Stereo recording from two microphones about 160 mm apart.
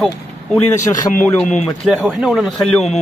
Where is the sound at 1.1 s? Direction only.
50° left (ahead or behind).